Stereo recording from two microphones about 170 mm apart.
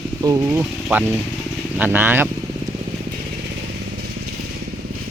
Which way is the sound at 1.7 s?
10° right (ahead or behind).